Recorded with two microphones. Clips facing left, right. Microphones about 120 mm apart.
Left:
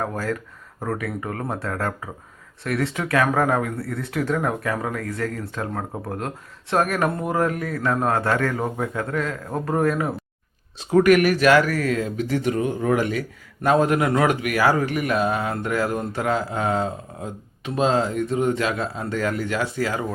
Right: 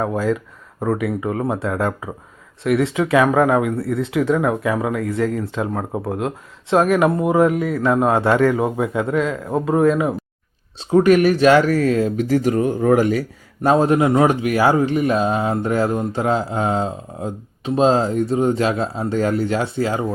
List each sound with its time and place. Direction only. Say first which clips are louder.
0.0 s speech: right 6 dB; 10° right (ahead or behind)
2.6 s speech: right 7 dB; 10° right (ahead or behind)
10.8 s speech: right 2 dB; 25° right (ahead or behind)
13.6 s speech: right 4 dB; 30° right (ahead or behind)